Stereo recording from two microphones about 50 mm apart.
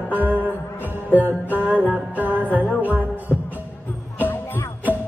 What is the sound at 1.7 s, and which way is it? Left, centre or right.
Music, right.